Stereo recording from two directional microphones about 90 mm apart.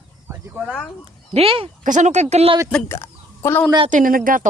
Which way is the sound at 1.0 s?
85° right.